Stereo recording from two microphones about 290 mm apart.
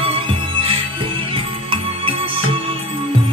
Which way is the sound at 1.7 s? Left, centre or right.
Centre.